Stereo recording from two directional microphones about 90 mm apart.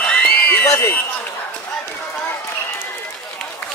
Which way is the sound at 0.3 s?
20° left (ahead or behind).